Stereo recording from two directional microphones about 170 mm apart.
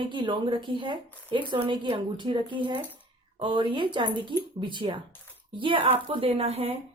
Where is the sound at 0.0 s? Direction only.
30° right (ahead or behind).